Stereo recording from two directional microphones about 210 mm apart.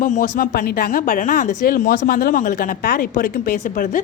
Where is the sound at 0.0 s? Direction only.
40° left (ahead or behind).